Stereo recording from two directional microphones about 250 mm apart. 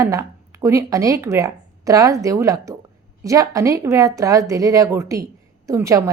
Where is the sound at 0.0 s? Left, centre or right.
Centre.